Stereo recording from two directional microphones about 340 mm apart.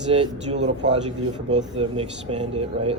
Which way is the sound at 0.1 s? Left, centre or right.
Centre.